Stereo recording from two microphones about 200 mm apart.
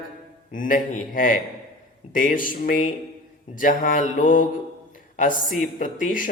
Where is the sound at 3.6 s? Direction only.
40° left (ahead or behind).